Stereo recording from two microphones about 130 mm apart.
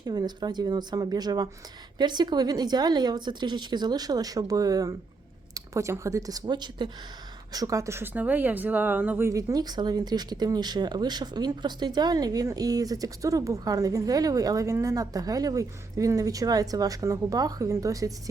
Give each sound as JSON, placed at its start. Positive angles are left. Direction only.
{"t": 0.0, "sound": "speech", "side_deg": -30}